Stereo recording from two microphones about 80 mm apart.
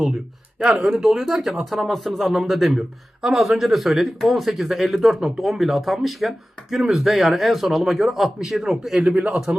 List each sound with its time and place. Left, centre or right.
0.6 s a man's voice: centre
9.0 s a man's voice: centre